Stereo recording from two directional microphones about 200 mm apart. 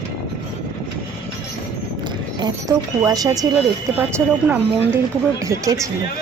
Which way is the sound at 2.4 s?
20° right (ahead or behind).